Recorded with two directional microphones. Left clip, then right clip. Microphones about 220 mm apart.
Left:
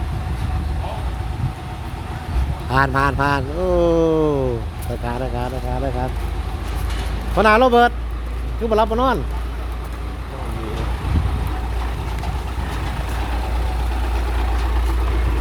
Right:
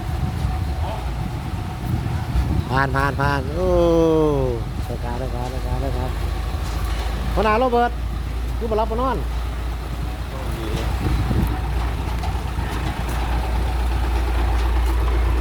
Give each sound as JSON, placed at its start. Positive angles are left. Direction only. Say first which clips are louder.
{"t": 2.6, "sound": "speech", "louder": "left 3 dB", "side_deg": 10}
{"t": 7.3, "sound": "speech", "louder": "left 5 dB", "side_deg": 25}